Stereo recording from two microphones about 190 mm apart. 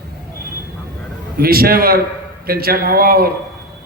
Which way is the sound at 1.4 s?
50° right (ahead or behind).